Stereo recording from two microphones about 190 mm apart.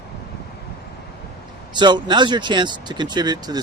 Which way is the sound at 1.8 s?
25° right (ahead or behind).